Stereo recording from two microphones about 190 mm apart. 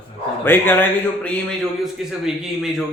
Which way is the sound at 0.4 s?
10° left (ahead or behind).